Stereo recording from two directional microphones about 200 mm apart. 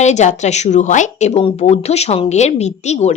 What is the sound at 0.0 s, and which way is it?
A woman's voice, 35° left (ahead or behind).